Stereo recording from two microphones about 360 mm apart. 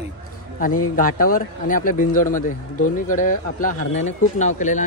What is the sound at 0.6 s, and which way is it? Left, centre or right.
Speech, left.